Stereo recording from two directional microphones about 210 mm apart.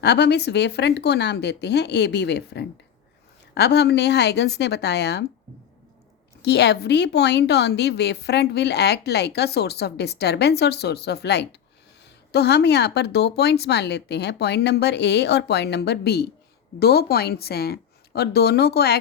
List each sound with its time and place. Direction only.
0.0 s a woman's voice: 55° left (ahead or behind)
6.4 s a woman's voice: 55° left (ahead or behind)